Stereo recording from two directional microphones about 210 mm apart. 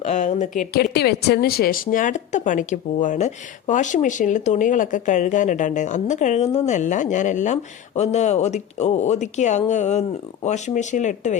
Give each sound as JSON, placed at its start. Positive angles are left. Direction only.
{"t": 0.0, "sound": "a woman's voice", "side_deg": 35}